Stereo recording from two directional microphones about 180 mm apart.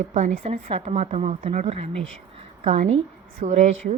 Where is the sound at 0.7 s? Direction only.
35° right (ahead or behind).